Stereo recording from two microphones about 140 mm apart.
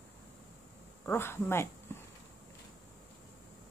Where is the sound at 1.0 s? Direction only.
15° left (ahead or behind).